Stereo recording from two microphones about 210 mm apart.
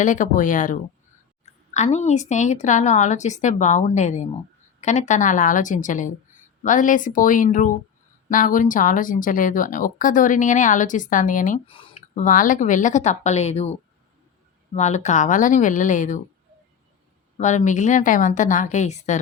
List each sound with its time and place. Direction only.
0.0 s speech: 40° left (ahead or behind)
11.6 s speech: 25° left (ahead or behind)
14.8 s speech: 35° left (ahead or behind)
17.3 s speech: 35° left (ahead or behind)